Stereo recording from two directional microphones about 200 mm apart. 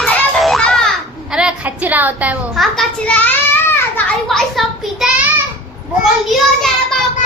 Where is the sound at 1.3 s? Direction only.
5° right (ahead or behind).